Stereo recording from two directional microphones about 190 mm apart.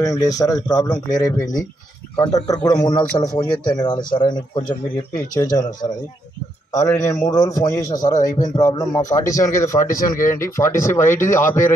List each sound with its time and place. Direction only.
0.0 s a man's voice: 20° left (ahead or behind)